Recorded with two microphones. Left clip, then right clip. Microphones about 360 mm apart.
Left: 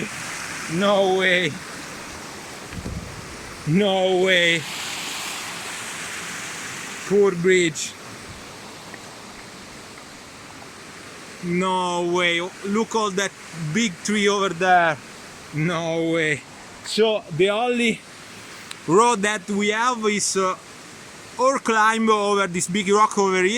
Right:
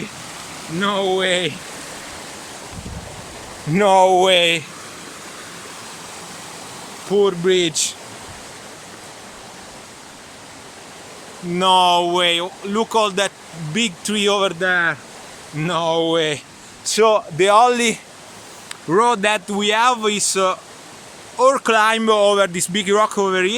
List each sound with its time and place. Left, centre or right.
0.8 s speech: centre
3.8 s speech: right
4.3 s speech: centre
7.2 s speech: centre
11.6 s speech: centre
17.1 s speech: right
17.4 s speech: centre
18.9 s speech: centre